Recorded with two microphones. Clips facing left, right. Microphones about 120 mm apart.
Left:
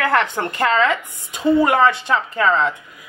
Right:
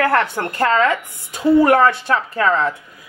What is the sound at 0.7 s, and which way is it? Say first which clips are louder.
Speech: right 1 dB; 10° right (ahead or behind).